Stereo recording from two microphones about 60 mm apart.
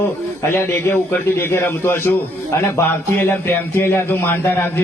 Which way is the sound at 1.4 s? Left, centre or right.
Left.